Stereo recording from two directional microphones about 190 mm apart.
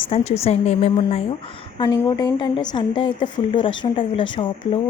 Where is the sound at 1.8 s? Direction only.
20° left (ahead or behind).